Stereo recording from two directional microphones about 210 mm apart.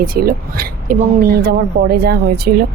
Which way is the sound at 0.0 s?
45° right (ahead or behind).